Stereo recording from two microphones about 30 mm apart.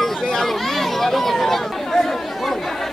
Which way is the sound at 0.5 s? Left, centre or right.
Centre.